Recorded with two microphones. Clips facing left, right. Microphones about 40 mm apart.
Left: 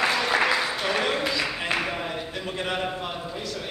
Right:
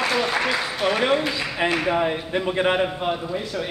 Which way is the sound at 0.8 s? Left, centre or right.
Centre.